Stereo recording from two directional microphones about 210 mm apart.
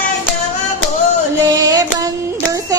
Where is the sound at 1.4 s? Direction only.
15° right (ahead or behind).